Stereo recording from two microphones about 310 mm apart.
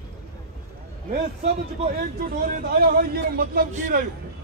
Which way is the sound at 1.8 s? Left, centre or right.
Right.